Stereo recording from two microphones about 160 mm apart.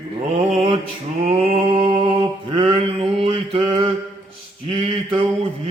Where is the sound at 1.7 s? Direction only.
35° right (ahead or behind).